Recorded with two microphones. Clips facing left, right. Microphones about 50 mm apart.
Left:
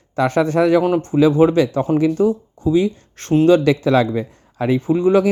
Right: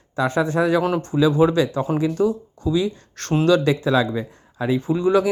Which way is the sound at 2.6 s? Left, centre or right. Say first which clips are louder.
Left 5 dB; left.